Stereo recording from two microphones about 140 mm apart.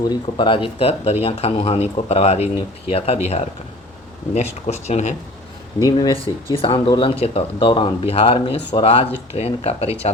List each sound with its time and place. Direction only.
0.0 s speech: 30° left (ahead or behind); by 3.4 s 50° left (ahead or behind)
4.6 s speech: 55° left (ahead or behind)
5.8 s speech: 25° left (ahead or behind)
6.2 s speech: 40° left (ahead or behind)